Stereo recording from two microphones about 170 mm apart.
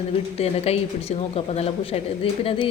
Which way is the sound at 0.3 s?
35° left (ahead or behind).